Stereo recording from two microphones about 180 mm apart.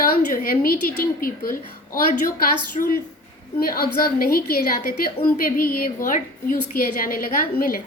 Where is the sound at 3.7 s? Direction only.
55° left (ahead or behind).